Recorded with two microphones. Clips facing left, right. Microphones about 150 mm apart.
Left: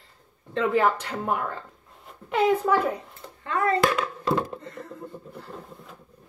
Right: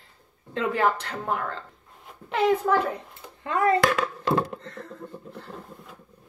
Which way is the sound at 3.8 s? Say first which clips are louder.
Even; 80° right.